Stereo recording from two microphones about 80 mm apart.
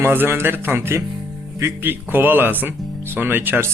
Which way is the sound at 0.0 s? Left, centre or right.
Right.